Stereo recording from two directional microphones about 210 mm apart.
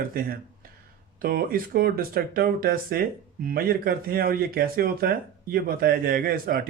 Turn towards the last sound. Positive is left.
turn(degrees=-45)  # may be behind; listen again after turning